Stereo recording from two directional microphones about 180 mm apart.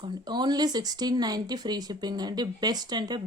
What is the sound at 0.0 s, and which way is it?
Speech, 25° right (ahead or behind).